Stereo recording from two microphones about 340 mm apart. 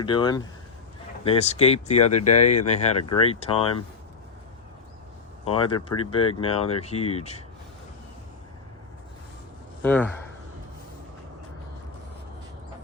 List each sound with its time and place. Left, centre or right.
0.0 s speech: centre
2.9 s speech: left
3.2 s speech: centre
5.5 s speech: centre
9.8 s speech: centre